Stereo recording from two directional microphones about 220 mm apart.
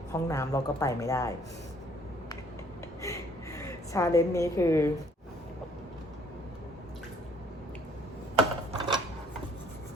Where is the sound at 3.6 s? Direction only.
15° left (ahead or behind).